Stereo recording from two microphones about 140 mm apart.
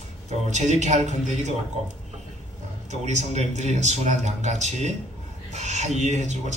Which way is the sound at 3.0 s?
55° right (ahead or behind).